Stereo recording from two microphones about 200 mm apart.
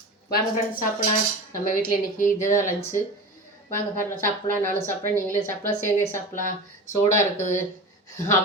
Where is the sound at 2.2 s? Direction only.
40° left (ahead or behind).